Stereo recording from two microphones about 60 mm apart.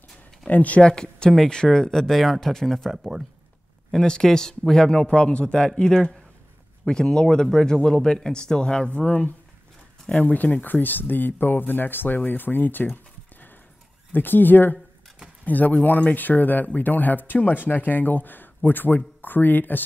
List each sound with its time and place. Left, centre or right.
0.5 s speech: left; by 3.0 s centre
3.0 s speech: centre
3.9 s speech: centre; by 19.8 s left